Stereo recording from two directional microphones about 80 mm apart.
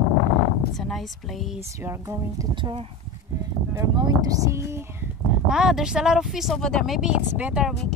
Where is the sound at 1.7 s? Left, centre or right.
Right.